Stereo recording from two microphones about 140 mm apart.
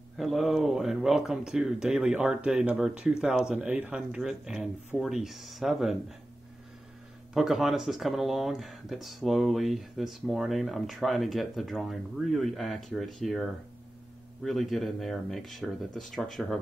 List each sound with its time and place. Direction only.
0.2 s speech: centre (ahead or behind)
7.3 s speech: 5° right (ahead or behind)